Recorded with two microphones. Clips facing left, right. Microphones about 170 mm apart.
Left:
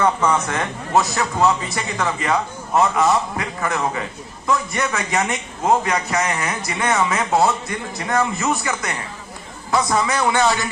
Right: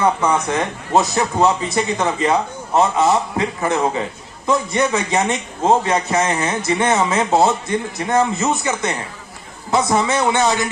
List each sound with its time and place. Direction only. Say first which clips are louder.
0.0 s a man's voice: right 1 dB; 10° right (ahead or behind)